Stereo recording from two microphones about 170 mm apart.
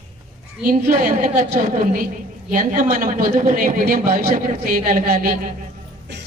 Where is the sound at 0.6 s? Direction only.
55° right (ahead or behind).